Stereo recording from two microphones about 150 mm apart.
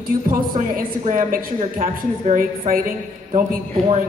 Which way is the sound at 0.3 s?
70° right (ahead or behind).